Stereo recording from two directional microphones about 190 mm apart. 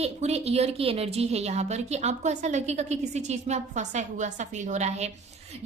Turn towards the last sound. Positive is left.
turn(degrees=-35)  # may be behind; listen again after turning